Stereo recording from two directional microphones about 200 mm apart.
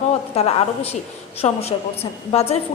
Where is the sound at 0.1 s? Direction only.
30° left (ahead or behind).